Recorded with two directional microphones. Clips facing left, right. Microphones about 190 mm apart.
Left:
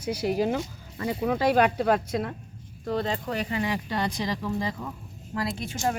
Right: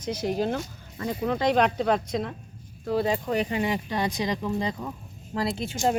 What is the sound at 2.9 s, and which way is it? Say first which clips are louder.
Speech: right 3 dB; 10° right (ahead or behind).